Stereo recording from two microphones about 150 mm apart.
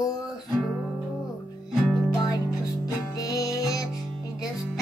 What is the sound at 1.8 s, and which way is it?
Music, 5° right (ahead or behind).